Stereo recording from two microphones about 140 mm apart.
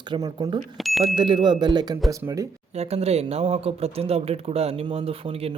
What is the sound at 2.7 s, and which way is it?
Speech, 50° right (ahead or behind).